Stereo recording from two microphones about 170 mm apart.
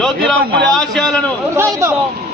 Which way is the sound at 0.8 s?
5° left (ahead or behind).